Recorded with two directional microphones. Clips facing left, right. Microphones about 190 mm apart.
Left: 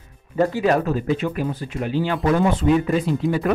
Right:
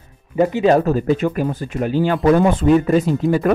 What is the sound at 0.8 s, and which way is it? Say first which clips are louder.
Speech: right 5 dB; 45° right (ahead or behind).